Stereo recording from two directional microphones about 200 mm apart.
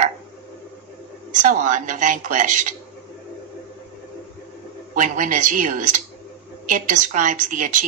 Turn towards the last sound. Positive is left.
turn(degrees=-40)  # may be behind; listen again after turning